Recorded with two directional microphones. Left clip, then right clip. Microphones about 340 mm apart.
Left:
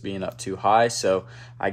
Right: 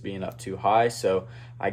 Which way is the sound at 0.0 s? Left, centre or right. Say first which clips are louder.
Left 3 dB; left.